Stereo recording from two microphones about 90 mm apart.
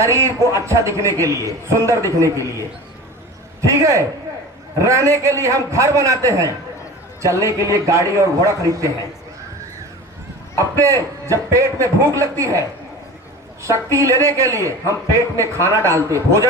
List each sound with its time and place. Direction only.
0.0 s a man's voice: 35° right (ahead or behind)
3.7 s a man's voice: 35° right (ahead or behind)
10.6 s a man's voice: 35° right (ahead or behind)